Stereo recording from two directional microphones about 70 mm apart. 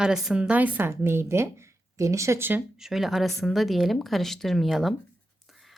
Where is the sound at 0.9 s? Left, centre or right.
Right.